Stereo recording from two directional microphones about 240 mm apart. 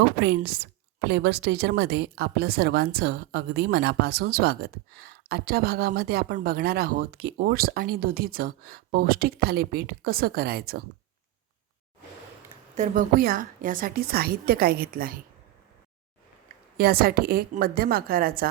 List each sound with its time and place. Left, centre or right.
0.2 s a woman's voice: right
12.7 s a woman's voice: right
16.7 s a woman's voice: right